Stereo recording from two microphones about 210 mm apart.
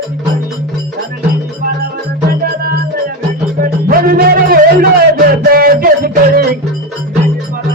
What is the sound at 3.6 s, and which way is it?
Music, 45° right (ahead or behind).